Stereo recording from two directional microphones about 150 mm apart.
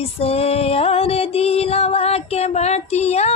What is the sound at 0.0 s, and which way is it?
Music, 40° left (ahead or behind).